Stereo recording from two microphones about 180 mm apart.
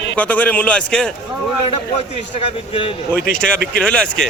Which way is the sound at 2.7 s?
30° left (ahead or behind).